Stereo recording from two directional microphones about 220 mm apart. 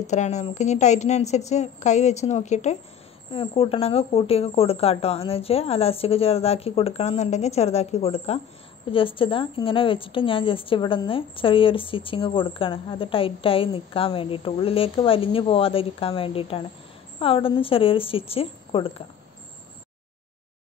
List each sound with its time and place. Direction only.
0.0 s a woman's voice: 30° left (ahead or behind)